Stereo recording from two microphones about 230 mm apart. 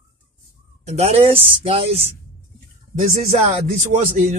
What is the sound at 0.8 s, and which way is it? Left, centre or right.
A man's voice, right.